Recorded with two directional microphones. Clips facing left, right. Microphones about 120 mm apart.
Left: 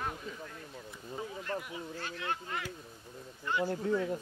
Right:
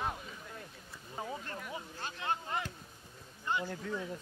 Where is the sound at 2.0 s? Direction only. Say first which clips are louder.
Right 2 dB; 25° right (ahead or behind).